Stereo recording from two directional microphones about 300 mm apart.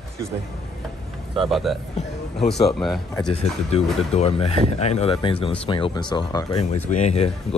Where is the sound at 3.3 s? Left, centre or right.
Centre.